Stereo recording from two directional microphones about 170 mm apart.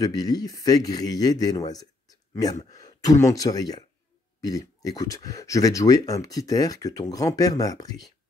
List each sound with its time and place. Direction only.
0.0 s speech: 20° left (ahead or behind)